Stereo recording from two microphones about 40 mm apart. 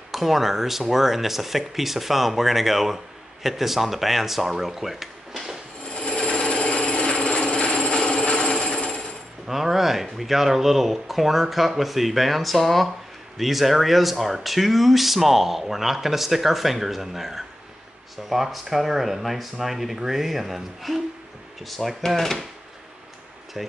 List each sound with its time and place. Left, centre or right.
0.1 s speech: centre
5.9 s filing: left
7.2 s a sound: left
9.5 s speech: centre